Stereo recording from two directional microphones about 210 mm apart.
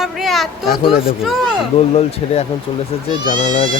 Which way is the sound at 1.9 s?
30° left (ahead or behind).